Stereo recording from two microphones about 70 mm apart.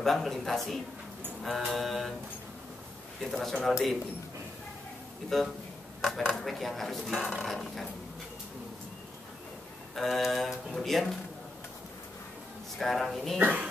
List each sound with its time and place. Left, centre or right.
0.0 s speech: centre
3.2 s speech: centre
5.3 s speech: centre
9.9 s speech: centre
12.7 s speech: centre
13.4 s speech: right